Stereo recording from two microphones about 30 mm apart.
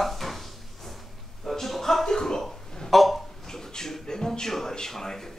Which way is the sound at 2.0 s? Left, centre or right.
Centre.